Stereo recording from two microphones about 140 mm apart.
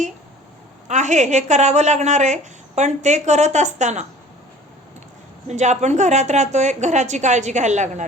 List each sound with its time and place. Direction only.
0.9 s a woman's voice: 60° right (ahead or behind)
5.5 s a woman's voice: 55° right (ahead or behind)